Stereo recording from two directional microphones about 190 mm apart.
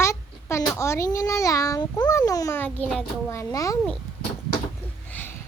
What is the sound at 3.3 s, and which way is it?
Speech, 15° left (ahead or behind).